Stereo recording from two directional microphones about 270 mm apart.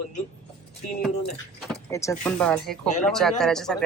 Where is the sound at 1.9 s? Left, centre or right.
Centre.